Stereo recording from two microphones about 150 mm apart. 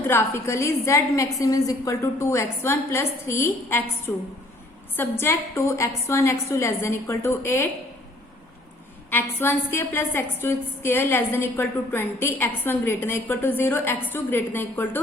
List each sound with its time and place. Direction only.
0.1 s a woman's voice: 15° left (ahead or behind)
9.0 s a woman's voice: 15° left (ahead or behind)